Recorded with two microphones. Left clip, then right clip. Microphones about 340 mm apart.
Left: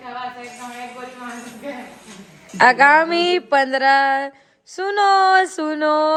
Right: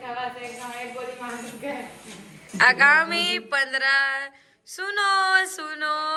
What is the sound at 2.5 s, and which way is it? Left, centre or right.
Speech, centre.